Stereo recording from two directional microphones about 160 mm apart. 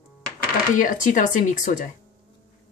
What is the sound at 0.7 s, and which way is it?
Speech, 55° left (ahead or behind).